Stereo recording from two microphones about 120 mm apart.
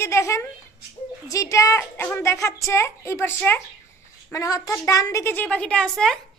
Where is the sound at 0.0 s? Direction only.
25° left (ahead or behind).